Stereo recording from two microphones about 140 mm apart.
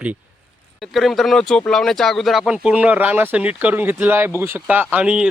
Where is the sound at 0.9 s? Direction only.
Centre (ahead or behind).